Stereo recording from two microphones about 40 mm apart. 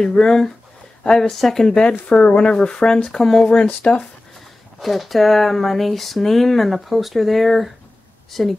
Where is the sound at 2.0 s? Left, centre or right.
Left.